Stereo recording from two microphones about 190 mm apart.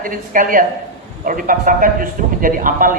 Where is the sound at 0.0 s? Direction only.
45° right (ahead or behind).